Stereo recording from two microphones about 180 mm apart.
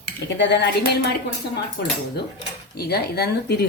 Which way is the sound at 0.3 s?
75° left (ahead or behind).